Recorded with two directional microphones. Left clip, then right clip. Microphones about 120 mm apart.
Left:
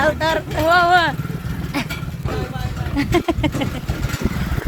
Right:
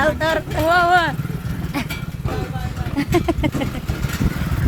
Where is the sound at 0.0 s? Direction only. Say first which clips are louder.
Left 1 dB; 10° right (ahead or behind); by 3.7 s 5° left (ahead or behind).